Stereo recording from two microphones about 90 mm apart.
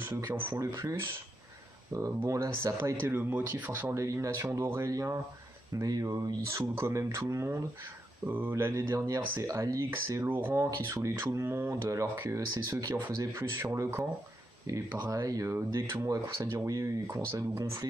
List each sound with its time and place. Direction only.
0.3 s speech: 25° right (ahead or behind)
1.9 s speech: 35° right (ahead or behind)
2.8 s speech: 25° right (ahead or behind)
5.8 s speech: 45° right (ahead or behind); by 8.9 s 25° right (ahead or behind)
8.9 s speech: 40° right (ahead or behind)
9.8 s speech: 25° right (ahead or behind)
15.0 s speech: 40° right (ahead or behind)